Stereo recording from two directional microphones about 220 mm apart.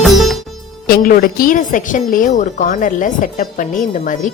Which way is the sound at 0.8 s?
40° left (ahead or behind).